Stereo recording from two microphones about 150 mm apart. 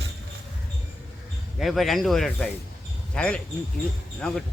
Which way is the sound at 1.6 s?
Centre (ahead or behind).